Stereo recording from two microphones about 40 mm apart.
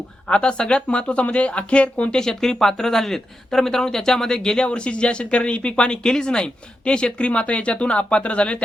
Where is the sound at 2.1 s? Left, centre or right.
Centre.